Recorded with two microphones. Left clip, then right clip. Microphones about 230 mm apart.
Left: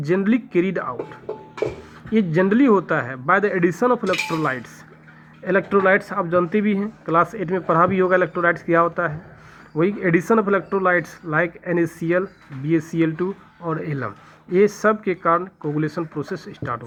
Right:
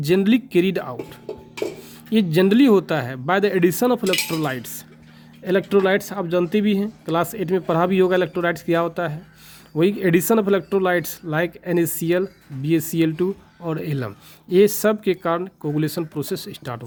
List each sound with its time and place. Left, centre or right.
0.0 s speech: right